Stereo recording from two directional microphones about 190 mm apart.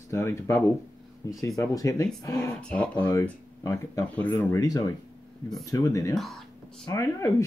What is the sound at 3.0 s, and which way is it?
Speech, 20° left (ahead or behind).